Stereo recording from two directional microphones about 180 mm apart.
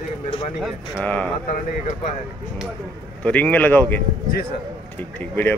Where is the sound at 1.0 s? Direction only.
5° left (ahead or behind).